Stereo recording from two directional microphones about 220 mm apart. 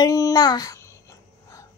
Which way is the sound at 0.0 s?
15° left (ahead or behind).